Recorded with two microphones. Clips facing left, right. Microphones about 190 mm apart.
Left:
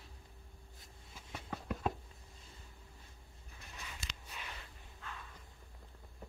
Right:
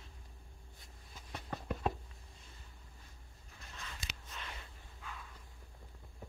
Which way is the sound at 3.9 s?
10° left (ahead or behind).